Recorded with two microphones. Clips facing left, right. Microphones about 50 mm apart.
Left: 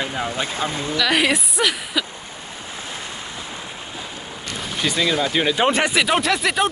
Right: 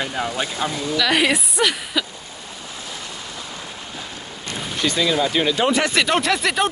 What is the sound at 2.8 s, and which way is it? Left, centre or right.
Waves, left.